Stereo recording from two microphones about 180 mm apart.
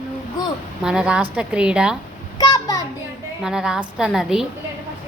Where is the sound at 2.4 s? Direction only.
20° left (ahead or behind).